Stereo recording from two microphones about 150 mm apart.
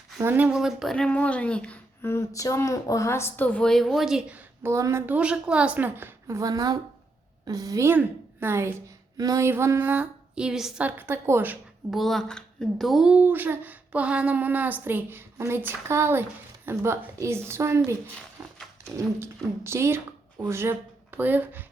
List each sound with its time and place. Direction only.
0.2 s speech: 15° right (ahead or behind)
11.9 s speech: centre (ahead or behind); by 17.9 s 20° right (ahead or behind)
18.4 s a sound: 15° right (ahead or behind)
18.9 s speech: 15° right (ahead or behind)